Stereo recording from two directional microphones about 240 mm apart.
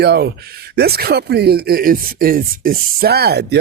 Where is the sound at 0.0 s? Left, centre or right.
Right.